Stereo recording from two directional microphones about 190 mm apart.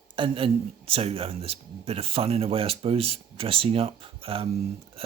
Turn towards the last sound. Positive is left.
turn(degrees=-30)  # may be behind; listen again after turning